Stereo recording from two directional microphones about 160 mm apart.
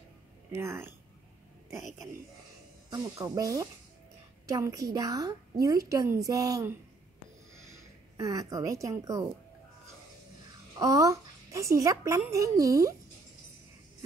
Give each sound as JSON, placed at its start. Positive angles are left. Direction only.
{"t": 0.5, "sound": "speech", "side_deg": -15}
{"t": 1.7, "sound": "speech", "side_deg": 0}
{"t": 2.9, "sound": "a woman's voice", "side_deg": -20}
{"t": 8.2, "sound": "a woman's voice", "side_deg": -20}
{"t": 10.8, "sound": "a woman's voice", "side_deg": -20}